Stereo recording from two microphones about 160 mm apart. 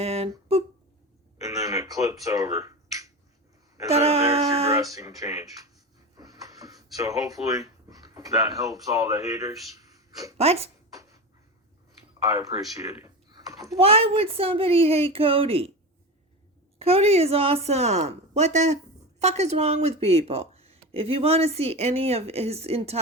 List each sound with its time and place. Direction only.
0.0 s a sound: 40° right (ahead or behind)
1.4 s finger snapping: 20° right (ahead or behind)
3.8 s speech: 40° right (ahead or behind)
4.7 s speech: 20° right (ahead or behind)
10.3 s speech: 40° right (ahead or behind)
12.3 s speech: 20° right (ahead or behind)
13.7 s speech: 35° right (ahead or behind)
16.7 s speech: 40° right (ahead or behind)